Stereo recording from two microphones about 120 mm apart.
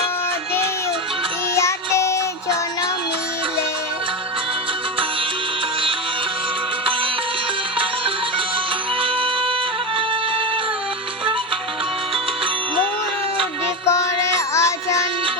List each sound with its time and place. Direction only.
1.5 s music: 25° left (ahead or behind)
13.8 s music: 25° left (ahead or behind)